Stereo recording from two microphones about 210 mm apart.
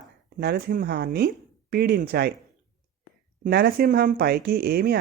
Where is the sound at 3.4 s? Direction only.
45° right (ahead or behind).